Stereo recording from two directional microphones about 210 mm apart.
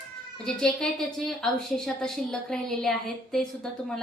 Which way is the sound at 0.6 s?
Centre (ahead or behind).